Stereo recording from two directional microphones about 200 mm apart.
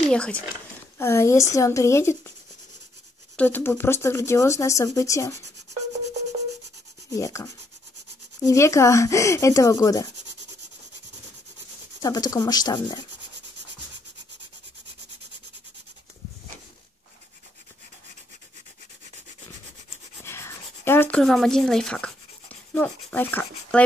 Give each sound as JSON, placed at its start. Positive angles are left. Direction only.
{"t": 0.1, "sound": "speech", "side_deg": 5}
{"t": 3.3, "sound": "speech", "side_deg": 10}
{"t": 7.1, "sound": "speech", "side_deg": 15}
{"t": 12.0, "sound": "speech", "side_deg": 20}
{"t": 20.2, "sound": "rub", "side_deg": 10}